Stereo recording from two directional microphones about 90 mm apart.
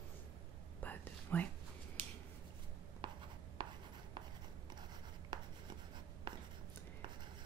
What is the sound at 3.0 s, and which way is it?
Writing, 60° right (ahead or behind).